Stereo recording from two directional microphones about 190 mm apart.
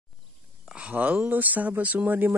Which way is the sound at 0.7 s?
5° right (ahead or behind).